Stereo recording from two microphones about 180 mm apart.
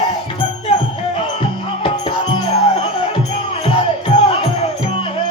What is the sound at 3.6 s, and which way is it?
Music, 30° left (ahead or behind).